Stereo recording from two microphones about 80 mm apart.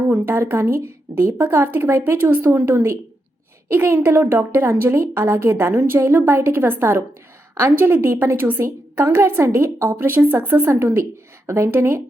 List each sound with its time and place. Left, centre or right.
0.3 s a woman's voice: right